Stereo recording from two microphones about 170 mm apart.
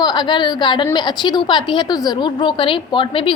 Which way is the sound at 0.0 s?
25° left (ahead or behind).